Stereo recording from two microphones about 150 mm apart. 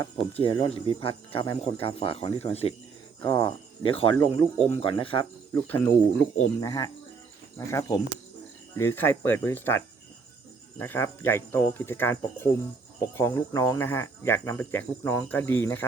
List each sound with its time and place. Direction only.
0.2 s speech: 40° left (ahead or behind)
3.2 s speech: 35° left (ahead or behind)
5.5 s speech: 15° left (ahead or behind)